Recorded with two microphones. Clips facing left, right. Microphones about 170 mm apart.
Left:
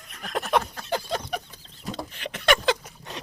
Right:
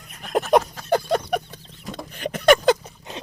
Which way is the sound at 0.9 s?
55° right (ahead or behind).